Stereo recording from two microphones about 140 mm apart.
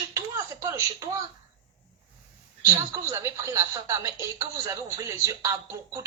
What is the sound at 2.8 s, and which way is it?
A woman's voice, 20° right (ahead or behind).